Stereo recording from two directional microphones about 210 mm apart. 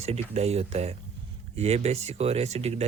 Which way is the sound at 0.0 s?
30° right (ahead or behind).